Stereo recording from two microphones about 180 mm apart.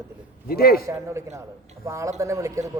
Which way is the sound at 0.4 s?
55° left (ahead or behind).